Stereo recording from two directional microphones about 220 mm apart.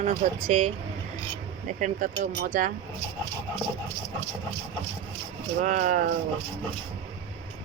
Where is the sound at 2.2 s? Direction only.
35° right (ahead or behind).